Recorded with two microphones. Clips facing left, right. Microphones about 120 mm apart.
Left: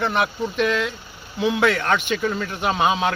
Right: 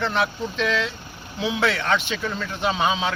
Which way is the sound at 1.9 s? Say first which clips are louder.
Left 3 dB; 10° left (ahead or behind).